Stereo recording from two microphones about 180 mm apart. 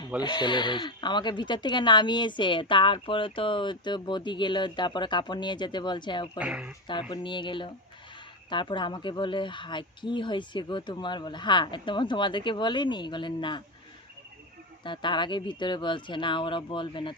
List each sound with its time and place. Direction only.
0.2 s speech: 25° left (ahead or behind)
6.4 s speech: 5° right (ahead or behind)
7.1 s speech: 25° left (ahead or behind)
14.8 s speech: 25° left (ahead or behind)